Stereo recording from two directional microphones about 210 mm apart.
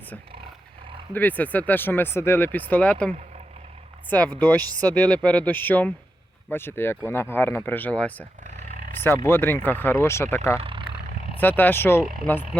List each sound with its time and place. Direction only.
1.1 s speech: 10° left (ahead or behind)
8.4 s roar: 40° right (ahead or behind)
8.9 s speech: 10° left (ahead or behind)
10.6 s vehicle: 25° right (ahead or behind)
11.3 s speech: 10° left (ahead or behind)